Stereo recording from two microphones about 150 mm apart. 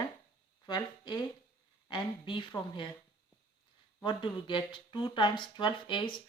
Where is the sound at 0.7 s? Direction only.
30° left (ahead or behind).